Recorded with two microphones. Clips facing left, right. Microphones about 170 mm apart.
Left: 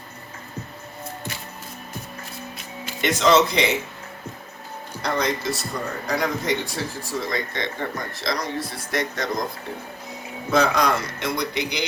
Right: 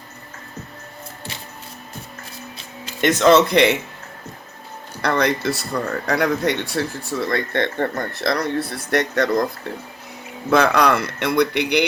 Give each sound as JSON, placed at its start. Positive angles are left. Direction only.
{"t": 3.0, "sound": "speech", "side_deg": -55}
{"t": 5.0, "sound": "speech", "side_deg": -65}